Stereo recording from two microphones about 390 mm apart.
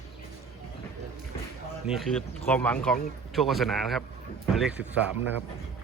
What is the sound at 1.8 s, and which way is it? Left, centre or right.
Speech, centre.